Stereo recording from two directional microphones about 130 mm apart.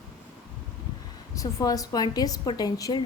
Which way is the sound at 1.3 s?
30° left (ahead or behind).